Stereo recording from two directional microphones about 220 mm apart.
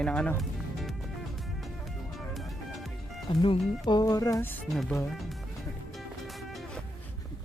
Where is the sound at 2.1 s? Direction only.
Centre (ahead or behind).